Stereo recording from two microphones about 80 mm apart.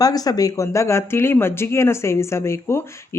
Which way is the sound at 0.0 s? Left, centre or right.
Left.